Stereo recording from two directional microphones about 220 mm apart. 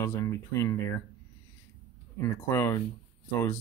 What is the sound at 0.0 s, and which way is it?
Speech, 10° left (ahead or behind).